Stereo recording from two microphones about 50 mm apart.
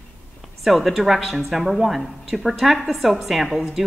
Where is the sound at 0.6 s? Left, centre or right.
Centre.